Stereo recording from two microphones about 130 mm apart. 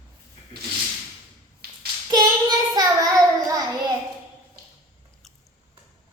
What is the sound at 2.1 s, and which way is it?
Child singing, 30° right (ahead or behind).